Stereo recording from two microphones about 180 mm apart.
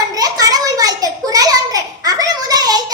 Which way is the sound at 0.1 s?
20° right (ahead or behind).